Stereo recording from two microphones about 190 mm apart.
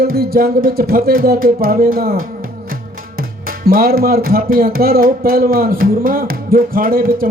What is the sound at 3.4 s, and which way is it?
Music, 50° right (ahead or behind).